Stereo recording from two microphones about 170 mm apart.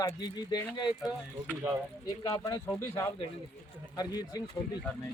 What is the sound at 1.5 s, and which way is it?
Speech, 15° right (ahead or behind).